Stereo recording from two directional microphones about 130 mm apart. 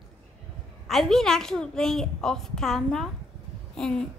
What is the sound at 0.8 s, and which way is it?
A woman's voice, centre (ahead or behind).